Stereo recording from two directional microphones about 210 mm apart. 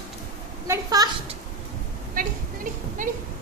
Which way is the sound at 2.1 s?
40° right (ahead or behind).